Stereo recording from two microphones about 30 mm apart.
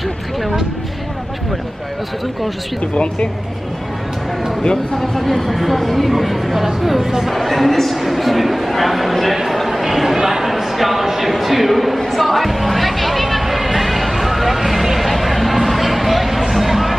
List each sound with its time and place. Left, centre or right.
2.9 s speech: left
4.9 s speech: centre
7.0 s speech: centre
7.2 s speech: centre
12.1 s a sound: centre